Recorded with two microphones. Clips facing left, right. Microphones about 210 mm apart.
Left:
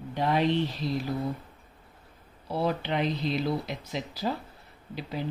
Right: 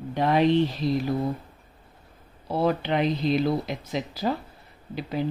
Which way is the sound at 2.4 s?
55° right (ahead or behind).